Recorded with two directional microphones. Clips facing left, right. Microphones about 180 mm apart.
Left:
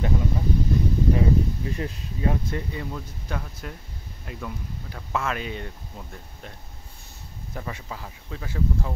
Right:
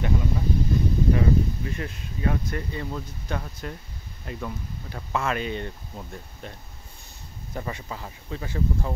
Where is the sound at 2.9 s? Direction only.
Centre (ahead or behind).